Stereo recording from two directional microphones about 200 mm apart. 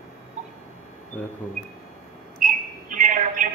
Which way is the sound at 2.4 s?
40° right (ahead or behind).